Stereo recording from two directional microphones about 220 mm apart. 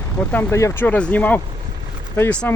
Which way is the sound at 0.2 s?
5° left (ahead or behind).